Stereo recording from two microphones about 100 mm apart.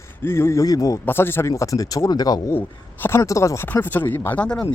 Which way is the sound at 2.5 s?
20° left (ahead or behind).